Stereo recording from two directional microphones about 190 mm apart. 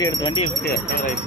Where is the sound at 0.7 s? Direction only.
45° left (ahead or behind).